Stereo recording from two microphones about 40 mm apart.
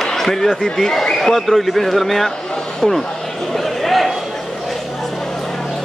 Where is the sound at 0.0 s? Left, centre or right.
Centre.